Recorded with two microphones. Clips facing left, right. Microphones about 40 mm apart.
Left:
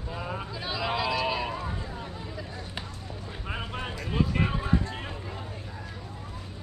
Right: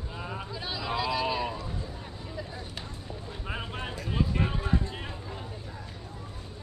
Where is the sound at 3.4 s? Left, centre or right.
Centre.